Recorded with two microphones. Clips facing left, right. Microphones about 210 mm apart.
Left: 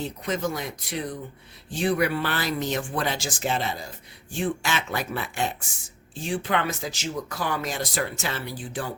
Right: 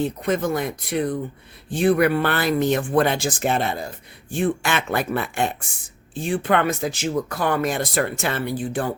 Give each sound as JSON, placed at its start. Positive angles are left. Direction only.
{"t": 0.0, "sound": "speech", "side_deg": -55}